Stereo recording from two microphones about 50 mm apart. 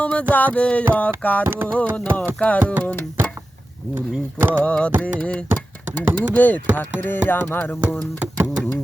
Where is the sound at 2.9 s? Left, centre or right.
Left.